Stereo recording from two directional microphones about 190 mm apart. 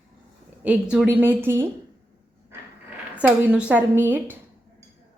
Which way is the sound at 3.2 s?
10° right (ahead or behind).